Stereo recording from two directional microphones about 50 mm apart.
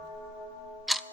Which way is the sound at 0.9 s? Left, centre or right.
Centre.